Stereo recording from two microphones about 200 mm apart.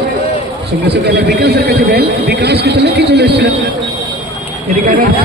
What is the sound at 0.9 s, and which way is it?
Speech, 55° right (ahead or behind).